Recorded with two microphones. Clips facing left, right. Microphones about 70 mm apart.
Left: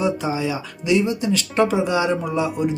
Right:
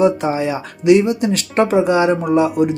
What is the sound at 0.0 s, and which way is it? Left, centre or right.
Speech, right.